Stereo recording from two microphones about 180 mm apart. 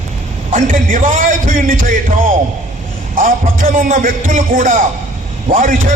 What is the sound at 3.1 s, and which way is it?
A man's voice, 50° right (ahead or behind).